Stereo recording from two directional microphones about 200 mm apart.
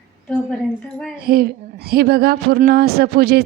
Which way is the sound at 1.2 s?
50° right (ahead or behind).